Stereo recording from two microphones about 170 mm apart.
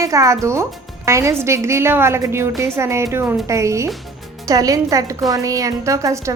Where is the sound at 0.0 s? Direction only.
20° right (ahead or behind).